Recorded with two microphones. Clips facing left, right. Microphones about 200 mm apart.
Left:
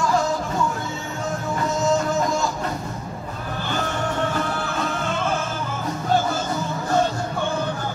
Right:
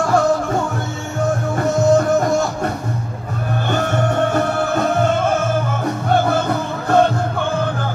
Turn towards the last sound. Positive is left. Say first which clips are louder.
# right 6 dB
turn(degrees=-60)  # may be behind; listen again after turning